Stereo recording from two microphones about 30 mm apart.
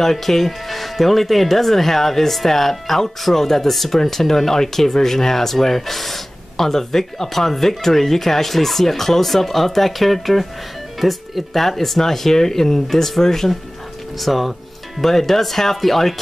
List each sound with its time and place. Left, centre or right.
0.0 s speech: centre